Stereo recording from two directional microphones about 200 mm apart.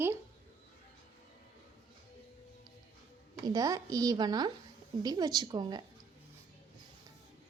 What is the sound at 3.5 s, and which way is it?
A woman's voice, 15° right (ahead or behind).